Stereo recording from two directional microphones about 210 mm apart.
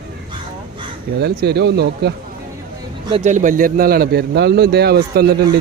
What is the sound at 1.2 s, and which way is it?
Speech, 50° right (ahead or behind).